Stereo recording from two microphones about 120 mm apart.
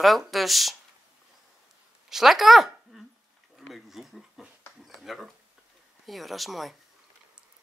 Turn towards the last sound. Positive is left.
turn(degrees=0)  # may be behind; listen again after turning